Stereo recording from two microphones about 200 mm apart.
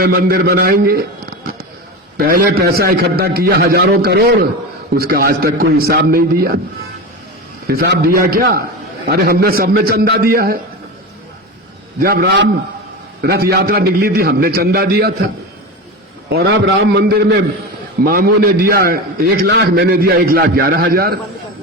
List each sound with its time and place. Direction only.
0.2 s a man's voice: 50° right (ahead or behind)
2.1 s a man's voice: 50° right (ahead or behind)
7.7 s a man's voice: 50° right (ahead or behind)
11.9 s a man's voice: 50° right (ahead or behind)
16.3 s a man's voice: 55° right (ahead or behind)